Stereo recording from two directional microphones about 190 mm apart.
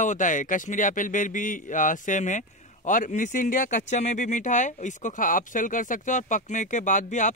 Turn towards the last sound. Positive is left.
turn(degrees=40)  # may be behind; listen again after turning